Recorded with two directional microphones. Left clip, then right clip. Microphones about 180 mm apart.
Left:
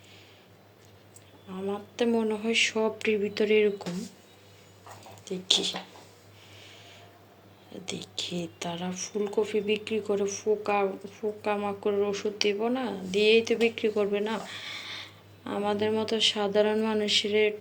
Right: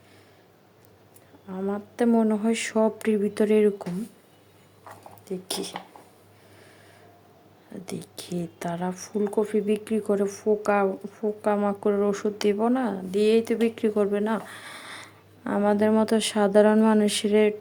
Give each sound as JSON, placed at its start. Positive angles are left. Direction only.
{"t": 1.5, "sound": "speech", "side_deg": -35}
{"t": 7.9, "sound": "speech", "side_deg": -45}